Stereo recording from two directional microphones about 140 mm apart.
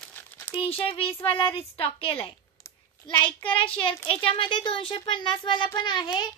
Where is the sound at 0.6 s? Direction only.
45° left (ahead or behind).